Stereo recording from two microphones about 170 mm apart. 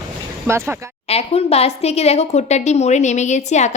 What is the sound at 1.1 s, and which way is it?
A woman's voice, 35° left (ahead or behind).